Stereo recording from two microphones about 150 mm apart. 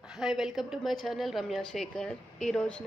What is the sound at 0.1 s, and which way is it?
A woman's voice, 5° right (ahead or behind).